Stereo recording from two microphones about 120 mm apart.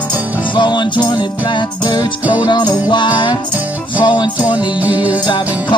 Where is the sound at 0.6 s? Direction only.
40° left (ahead or behind).